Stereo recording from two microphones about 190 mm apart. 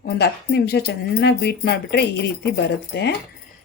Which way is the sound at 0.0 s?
60° left (ahead or behind).